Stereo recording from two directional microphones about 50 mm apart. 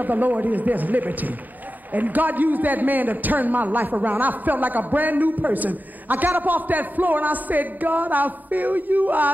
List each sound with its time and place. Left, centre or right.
0.0 s a man's voice: right